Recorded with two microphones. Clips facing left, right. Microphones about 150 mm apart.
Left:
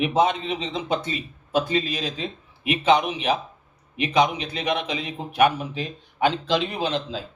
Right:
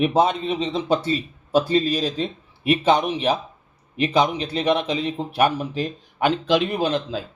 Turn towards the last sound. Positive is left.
turn(degrees=-45)  # may be behind; listen again after turning